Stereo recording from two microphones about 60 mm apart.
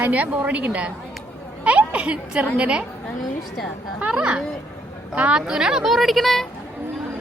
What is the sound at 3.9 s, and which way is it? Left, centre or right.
Speech, centre.